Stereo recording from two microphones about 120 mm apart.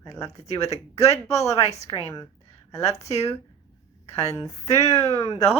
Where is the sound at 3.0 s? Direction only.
65° left (ahead or behind).